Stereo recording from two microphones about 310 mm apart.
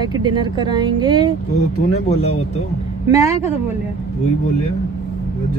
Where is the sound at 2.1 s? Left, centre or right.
Centre.